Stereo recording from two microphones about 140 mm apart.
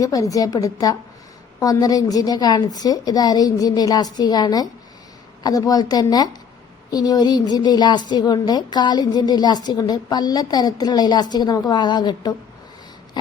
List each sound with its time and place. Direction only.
0.0 s a woman's voice: 25° left (ahead or behind)